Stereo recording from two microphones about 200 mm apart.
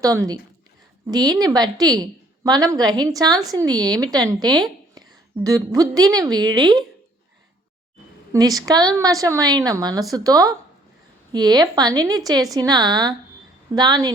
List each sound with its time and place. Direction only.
0.0 s a woman's voice: 15° right (ahead or behind)
8.3 s a woman's voice: 15° right (ahead or behind)